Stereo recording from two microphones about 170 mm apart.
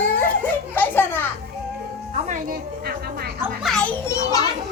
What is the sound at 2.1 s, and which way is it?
Music, 45° right (ahead or behind).